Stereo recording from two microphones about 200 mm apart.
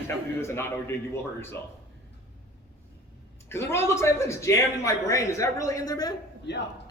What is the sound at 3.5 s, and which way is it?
A man's voice, 15° left (ahead or behind).